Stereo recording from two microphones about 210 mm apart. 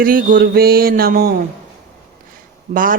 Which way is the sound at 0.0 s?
40° right (ahead or behind).